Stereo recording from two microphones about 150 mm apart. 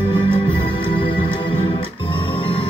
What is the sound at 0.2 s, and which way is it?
Music, 35° left (ahead or behind).